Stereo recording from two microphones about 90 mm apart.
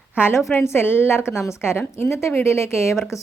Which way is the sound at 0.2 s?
25° left (ahead or behind).